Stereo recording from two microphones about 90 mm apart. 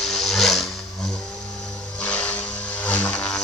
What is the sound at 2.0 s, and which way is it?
Vehicle, 15° left (ahead or behind).